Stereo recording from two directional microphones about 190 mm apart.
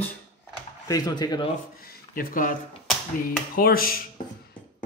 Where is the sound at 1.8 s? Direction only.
50° left (ahead or behind).